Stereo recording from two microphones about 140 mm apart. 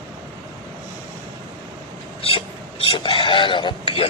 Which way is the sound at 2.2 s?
45° left (ahead or behind).